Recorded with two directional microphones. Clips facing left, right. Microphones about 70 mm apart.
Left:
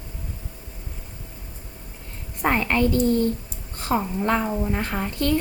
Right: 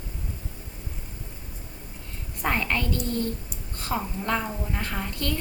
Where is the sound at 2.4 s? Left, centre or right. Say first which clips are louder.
Left 6 dB; left.